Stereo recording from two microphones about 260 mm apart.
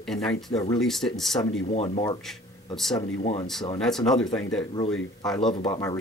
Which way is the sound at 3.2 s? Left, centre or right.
Left.